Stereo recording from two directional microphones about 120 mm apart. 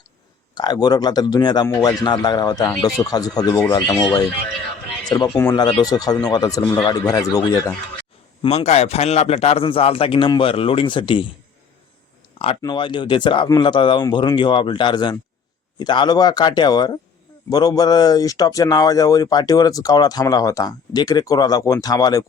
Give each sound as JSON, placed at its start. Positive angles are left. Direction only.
{"t": 0.5, "sound": "speech", "side_deg": 35}
{"t": 5.0, "sound": "speech", "side_deg": 35}
{"t": 8.4, "sound": "a man's voice", "side_deg": 65}
{"t": 12.6, "sound": "speech", "side_deg": 40}